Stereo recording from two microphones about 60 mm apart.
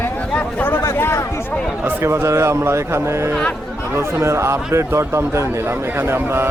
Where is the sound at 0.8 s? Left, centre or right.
Left.